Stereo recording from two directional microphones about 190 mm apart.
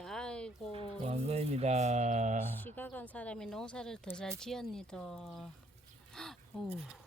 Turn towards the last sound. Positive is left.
turn(degrees=0)  # may be behind; listen again after turning